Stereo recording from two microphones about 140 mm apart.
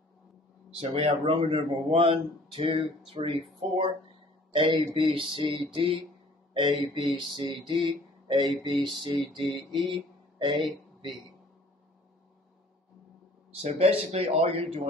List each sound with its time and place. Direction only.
0.7 s a sound: 40° right (ahead or behind)
10.6 s speech: 35° right (ahead or behind)
13.5 s speech: 45° right (ahead or behind)